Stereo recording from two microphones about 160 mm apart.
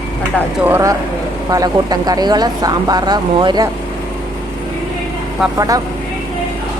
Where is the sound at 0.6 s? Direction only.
20° right (ahead or behind).